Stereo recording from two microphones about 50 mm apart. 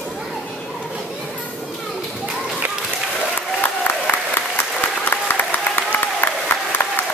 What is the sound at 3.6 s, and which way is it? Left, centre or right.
Applause, left.